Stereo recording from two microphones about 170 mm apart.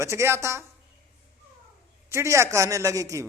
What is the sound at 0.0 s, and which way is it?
Speech, 15° right (ahead or behind).